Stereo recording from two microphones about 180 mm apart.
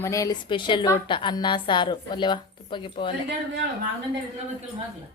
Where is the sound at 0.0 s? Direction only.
15° left (ahead or behind).